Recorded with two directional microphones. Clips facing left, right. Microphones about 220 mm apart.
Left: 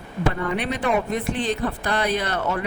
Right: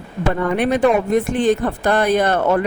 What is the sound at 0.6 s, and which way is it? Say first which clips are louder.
A woman's voice: right 8 dB; 50° right (ahead or behind).